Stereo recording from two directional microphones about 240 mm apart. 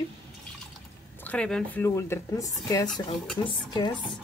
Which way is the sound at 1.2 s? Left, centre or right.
Centre.